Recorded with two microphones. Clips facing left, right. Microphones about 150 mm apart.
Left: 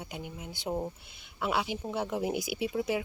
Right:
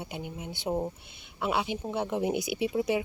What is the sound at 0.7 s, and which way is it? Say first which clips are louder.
Speech: right 3 dB; 15° right (ahead or behind).